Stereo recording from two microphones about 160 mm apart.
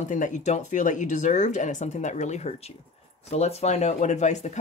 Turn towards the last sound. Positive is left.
turn(degrees=45)  # may be behind; listen again after turning